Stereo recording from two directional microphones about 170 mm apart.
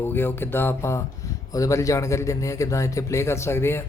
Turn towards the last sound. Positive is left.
turn(degrees=15)  # may be behind; listen again after turning